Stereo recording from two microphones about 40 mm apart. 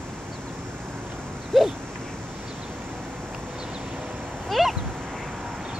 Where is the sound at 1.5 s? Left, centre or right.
Centre.